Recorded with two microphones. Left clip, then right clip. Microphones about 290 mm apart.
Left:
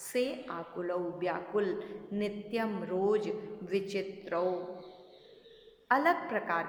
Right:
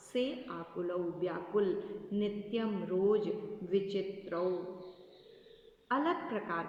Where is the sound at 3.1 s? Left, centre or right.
Centre.